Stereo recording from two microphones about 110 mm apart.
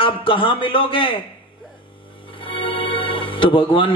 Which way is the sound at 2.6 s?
55° left (ahead or behind).